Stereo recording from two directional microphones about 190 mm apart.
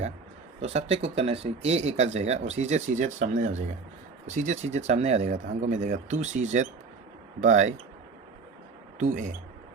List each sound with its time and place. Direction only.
0.6 s speech: 35° right (ahead or behind)
9.0 s speech: 40° right (ahead or behind)